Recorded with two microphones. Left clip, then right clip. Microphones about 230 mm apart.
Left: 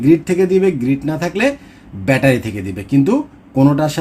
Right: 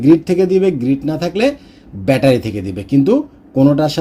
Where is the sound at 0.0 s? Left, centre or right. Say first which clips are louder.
Right 2 dB; centre.